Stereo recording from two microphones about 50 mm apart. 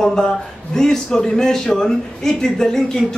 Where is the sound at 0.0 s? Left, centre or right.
Centre.